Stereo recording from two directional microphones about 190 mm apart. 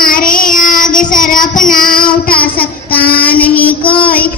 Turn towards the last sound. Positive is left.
turn(degrees=25)  # may be behind; listen again after turning